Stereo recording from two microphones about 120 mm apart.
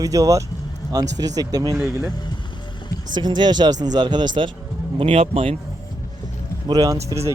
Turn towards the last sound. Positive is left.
turn(degrees=-25)  # may be behind; listen again after turning